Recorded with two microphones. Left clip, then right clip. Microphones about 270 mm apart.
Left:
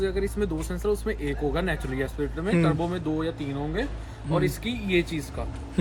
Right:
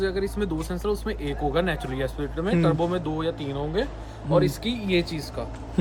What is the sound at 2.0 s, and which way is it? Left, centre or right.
Speech, centre.